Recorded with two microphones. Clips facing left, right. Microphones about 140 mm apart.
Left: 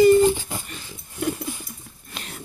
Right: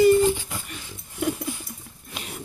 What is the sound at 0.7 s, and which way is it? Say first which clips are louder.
Pig: left 1 dB; 5° right (ahead or behind).